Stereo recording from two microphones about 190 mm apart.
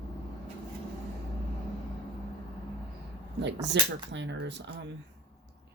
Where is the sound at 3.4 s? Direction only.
65° right (ahead or behind).